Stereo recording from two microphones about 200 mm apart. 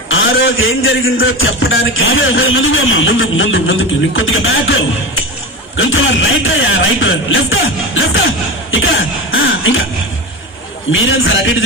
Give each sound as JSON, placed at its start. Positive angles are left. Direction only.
{"t": 0.1, "sound": "a man's voice", "side_deg": 75}
{"t": 5.7, "sound": "speech", "side_deg": 75}
{"t": 8.7, "sound": "cough", "side_deg": 75}
{"t": 10.9, "sound": "speech", "side_deg": 75}